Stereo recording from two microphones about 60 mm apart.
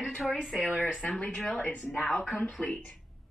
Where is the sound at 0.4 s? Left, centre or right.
Centre.